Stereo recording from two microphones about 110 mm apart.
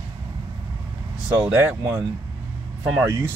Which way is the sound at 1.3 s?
15° right (ahead or behind).